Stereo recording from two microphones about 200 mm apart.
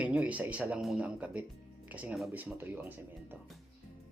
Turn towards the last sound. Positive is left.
turn(degrees=-10)  # may be behind; listen again after turning